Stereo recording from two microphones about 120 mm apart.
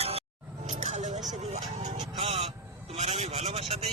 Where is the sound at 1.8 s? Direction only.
50° right (ahead or behind).